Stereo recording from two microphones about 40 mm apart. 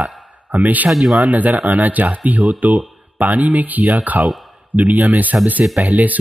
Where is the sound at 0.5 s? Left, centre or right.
Right.